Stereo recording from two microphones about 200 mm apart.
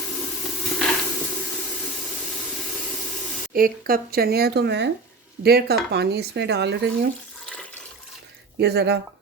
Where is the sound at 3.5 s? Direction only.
45° right (ahead or behind).